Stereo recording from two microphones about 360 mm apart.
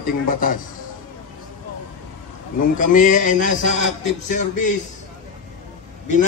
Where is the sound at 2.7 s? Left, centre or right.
Left.